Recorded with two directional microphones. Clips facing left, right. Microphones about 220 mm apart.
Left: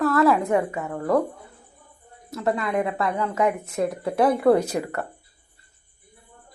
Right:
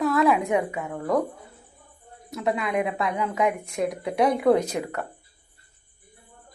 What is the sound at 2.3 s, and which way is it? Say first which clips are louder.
Speech: left 1 dB; centre (ahead or behind).